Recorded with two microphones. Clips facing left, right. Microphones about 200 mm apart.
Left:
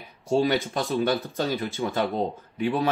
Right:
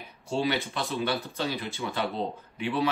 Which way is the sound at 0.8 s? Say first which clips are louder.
Left 5 dB; 40° left (ahead or behind).